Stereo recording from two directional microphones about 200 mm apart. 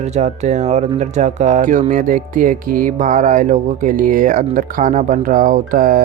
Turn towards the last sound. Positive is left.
turn(degrees=-45)  # may be behind; listen again after turning